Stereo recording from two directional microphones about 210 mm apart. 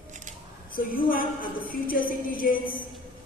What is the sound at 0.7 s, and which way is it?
A woman's voice, 40° left (ahead or behind).